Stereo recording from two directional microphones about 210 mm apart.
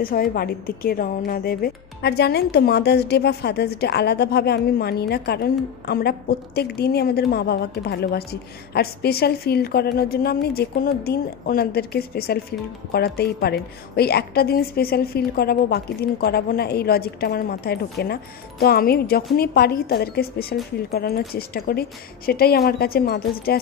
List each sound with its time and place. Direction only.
0.0 s a woman's voice: 45° left (ahead or behind)